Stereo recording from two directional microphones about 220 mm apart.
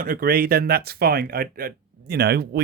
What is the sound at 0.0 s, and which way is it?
Speech, 40° right (ahead or behind).